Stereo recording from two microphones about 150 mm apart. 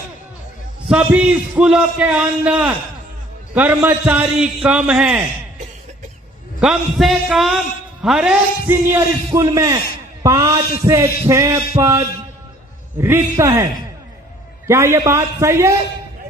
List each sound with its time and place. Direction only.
0.9 s a man's voice: 5° right (ahead or behind)
6.6 s a man's voice: centre (ahead or behind); by 13.7 s 20° right (ahead or behind)
14.7 s a man's voice: 20° right (ahead or behind)